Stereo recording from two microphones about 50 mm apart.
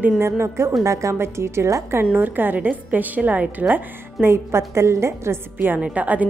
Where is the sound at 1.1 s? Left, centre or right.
Right.